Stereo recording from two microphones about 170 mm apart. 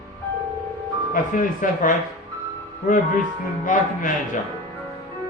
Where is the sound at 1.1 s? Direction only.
50° left (ahead or behind).